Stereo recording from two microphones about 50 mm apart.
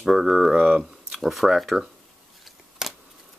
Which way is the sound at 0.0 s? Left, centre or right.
Centre.